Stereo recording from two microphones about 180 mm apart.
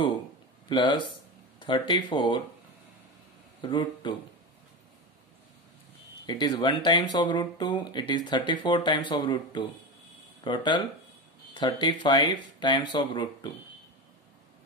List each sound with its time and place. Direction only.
0.7 s speech: 25° left (ahead or behind)
3.6 s speech: 25° left (ahead or behind)
6.2 s speech: 25° left (ahead or behind)